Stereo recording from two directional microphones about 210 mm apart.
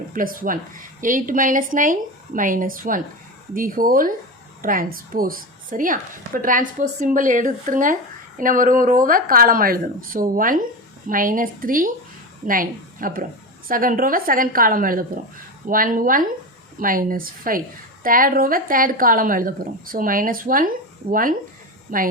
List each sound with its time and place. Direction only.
0.1 s a woman's voice: 40° right (ahead or behind)